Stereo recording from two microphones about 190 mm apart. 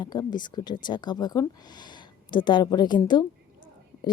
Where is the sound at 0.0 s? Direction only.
20° left (ahead or behind).